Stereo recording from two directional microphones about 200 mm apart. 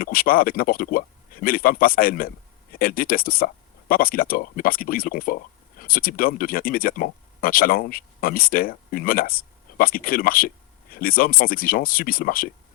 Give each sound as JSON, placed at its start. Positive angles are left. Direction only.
{"t": 0.0, "sound": "speech", "side_deg": 45}